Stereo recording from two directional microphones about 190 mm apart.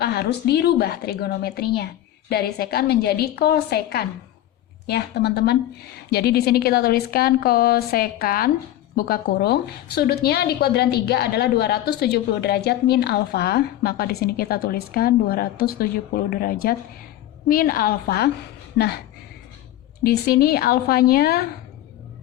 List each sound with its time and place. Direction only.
0.0 s a woman's voice: 55° left (ahead or behind)
18.8 s speech: 65° left (ahead or behind)
20.1 s a woman's voice: 55° left (ahead or behind)